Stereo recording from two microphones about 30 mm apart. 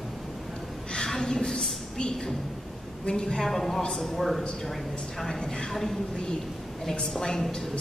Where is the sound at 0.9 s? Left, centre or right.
Centre.